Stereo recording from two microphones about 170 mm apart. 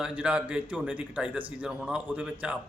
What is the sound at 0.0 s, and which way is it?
Speech, 5° right (ahead or behind).